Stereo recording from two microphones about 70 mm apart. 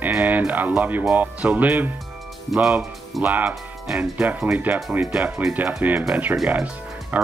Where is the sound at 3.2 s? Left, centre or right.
Right.